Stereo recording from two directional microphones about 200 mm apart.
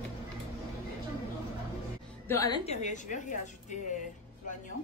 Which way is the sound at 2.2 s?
15° left (ahead or behind).